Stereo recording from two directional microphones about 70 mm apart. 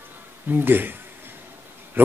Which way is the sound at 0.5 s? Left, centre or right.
Right.